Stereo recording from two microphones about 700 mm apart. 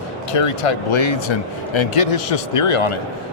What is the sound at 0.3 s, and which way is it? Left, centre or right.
Speech, left.